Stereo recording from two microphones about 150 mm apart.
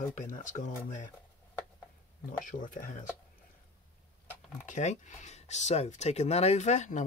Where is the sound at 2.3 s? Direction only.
65° left (ahead or behind).